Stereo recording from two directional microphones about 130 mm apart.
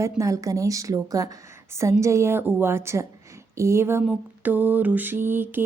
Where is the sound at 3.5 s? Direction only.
20° right (ahead or behind).